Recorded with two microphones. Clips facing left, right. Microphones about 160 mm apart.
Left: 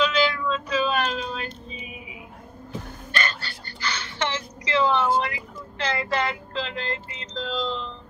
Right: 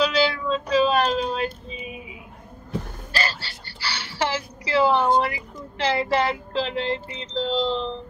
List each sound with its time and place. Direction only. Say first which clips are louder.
0.0 s music: right 1 dB; 35° right (ahead or behind)
3.1 s gasp: right 1 dB; 30° right (ahead or behind)
5.6 s music: right 5 dB; 30° right (ahead or behind)